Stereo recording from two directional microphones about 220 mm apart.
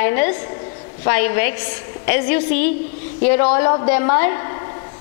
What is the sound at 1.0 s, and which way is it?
A woman's voice, 15° left (ahead or behind).